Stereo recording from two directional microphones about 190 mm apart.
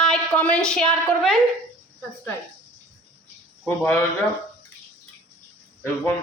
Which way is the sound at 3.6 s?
10° left (ahead or behind).